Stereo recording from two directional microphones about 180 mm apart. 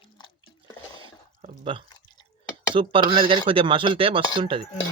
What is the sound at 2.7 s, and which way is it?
Speech, 30° right (ahead or behind).